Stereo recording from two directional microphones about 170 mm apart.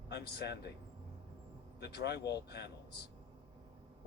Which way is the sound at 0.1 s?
75° left (ahead or behind).